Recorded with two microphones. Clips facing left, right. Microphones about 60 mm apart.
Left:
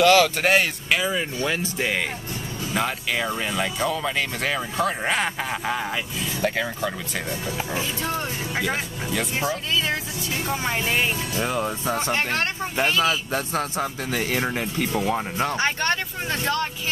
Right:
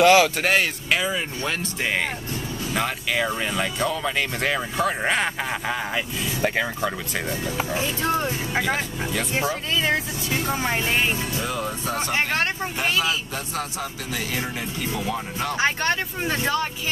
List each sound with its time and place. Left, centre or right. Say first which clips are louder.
0.0 s speech: right 1 dB; centre
0.4 s speech: left 1 dB; centre
6.4 s speech: right 1 dB; centre
8.0 s speech: right 4 dB; right
9.4 s speech: right 2 dB; right
11.3 s a man's voice: left 2 dB; left
13.0 s a man's voice: left 3 dB; left
15.5 s speech: right 4 dB; centre